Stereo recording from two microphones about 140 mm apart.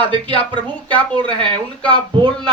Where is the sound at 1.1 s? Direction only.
35° right (ahead or behind).